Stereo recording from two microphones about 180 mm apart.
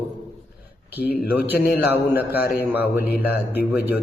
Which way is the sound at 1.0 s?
60° left (ahead or behind).